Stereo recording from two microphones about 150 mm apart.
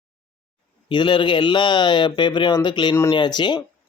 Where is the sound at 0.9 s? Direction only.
30° left (ahead or behind).